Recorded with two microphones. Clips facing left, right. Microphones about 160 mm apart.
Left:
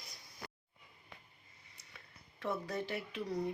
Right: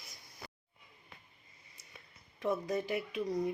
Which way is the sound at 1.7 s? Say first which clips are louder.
Right 1 dB; 15° right (ahead or behind).